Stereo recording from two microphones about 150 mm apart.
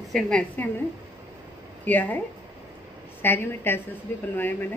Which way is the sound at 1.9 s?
10° left (ahead or behind).